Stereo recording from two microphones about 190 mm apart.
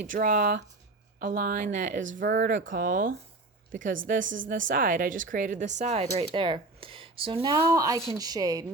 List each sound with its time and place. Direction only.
0.0 s a woman's voice: 45° right (ahead or behind); by 8.6 s 20° right (ahead or behind)